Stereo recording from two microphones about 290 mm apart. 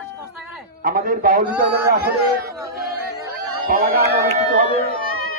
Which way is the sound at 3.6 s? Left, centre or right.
Right.